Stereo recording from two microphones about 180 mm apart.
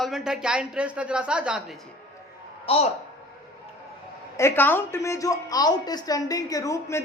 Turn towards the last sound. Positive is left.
turn(degrees=15)  # may be behind; listen again after turning